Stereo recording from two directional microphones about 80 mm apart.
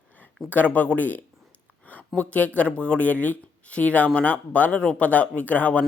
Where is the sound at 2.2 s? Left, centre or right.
Centre.